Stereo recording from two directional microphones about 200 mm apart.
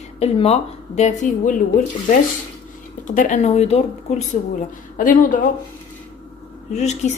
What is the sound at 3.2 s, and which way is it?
Speech, 35° left (ahead or behind).